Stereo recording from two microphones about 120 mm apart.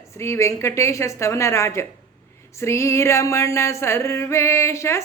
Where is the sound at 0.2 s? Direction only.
25° left (ahead or behind).